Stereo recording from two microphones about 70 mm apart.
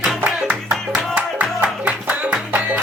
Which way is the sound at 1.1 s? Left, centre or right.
Centre.